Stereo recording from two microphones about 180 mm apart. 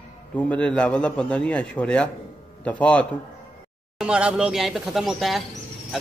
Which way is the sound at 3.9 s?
5° right (ahead or behind).